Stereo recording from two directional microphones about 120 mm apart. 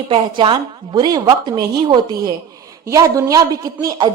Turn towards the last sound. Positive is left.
turn(degrees=-35)  # may be behind; listen again after turning